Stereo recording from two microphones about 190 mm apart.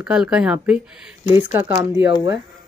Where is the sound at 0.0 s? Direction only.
5° right (ahead or behind).